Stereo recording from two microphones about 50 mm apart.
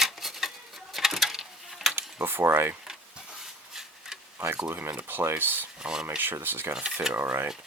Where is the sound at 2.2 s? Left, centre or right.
Right.